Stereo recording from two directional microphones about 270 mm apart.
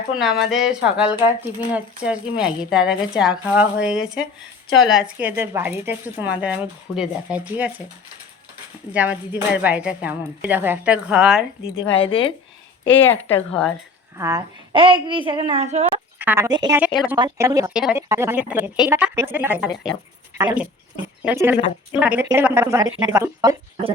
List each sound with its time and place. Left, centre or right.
0.2 s speech: centre
8.9 s speech: centre
11.6 s a woman's voice: centre
13.0 s speech: centre
14.2 s a woman's voice: centre
16.1 s speech: centre